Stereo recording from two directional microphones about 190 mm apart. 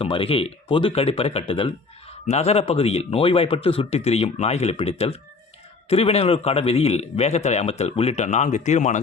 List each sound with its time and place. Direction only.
0.0 s a man's voice: 30° left (ahead or behind)